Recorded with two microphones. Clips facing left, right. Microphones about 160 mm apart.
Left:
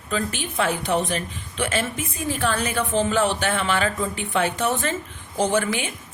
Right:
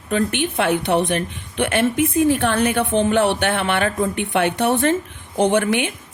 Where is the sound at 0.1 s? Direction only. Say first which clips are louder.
Right 7 dB; 65° right (ahead or behind).